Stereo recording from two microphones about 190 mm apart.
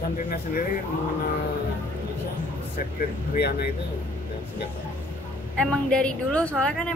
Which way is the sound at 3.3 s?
55° left (ahead or behind).